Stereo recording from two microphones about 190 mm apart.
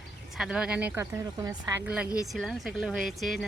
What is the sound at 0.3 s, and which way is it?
Speech, 5° right (ahead or behind).